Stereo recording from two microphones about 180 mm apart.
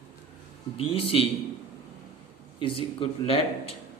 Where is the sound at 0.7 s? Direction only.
30° left (ahead or behind).